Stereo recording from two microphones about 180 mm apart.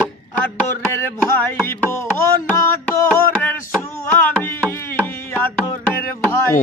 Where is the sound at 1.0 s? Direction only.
10° left (ahead or behind).